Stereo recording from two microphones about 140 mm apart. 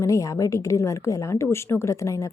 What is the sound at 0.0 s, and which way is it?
A woman's voice, 20° left (ahead or behind).